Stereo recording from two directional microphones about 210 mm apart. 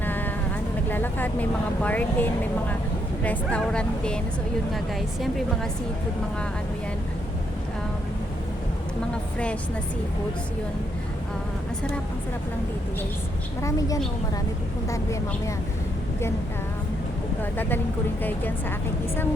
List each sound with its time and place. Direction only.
0.0 s vehicle: 10° left (ahead or behind)
0.9 s speech: 10° left (ahead or behind)
13.6 s speech: 15° left (ahead or behind)
18.2 s speech: 10° left (ahead or behind)